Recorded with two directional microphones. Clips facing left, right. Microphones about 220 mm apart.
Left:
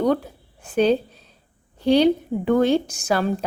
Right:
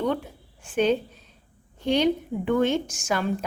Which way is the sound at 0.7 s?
35° left (ahead or behind).